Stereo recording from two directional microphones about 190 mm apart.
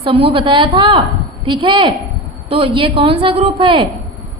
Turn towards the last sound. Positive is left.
turn(degrees=-25)  # may be behind; listen again after turning